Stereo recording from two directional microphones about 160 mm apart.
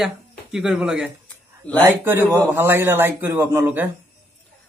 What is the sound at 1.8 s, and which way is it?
A man's voice, 15° right (ahead or behind).